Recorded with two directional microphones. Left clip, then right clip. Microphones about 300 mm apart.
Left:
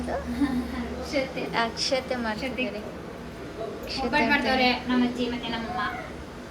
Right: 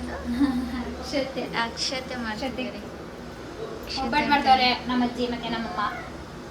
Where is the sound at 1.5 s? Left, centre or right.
Centre.